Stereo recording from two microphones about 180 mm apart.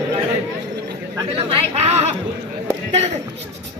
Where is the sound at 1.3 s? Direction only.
35° right (ahead or behind).